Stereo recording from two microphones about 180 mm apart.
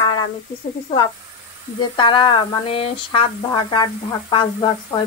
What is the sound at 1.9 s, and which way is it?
Sizzle, 25° left (ahead or behind).